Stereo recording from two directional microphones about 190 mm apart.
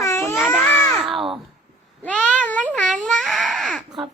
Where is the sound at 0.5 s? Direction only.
Centre (ahead or behind).